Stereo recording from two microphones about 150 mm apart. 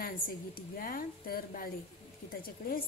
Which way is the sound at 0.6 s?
70° left (ahead or behind).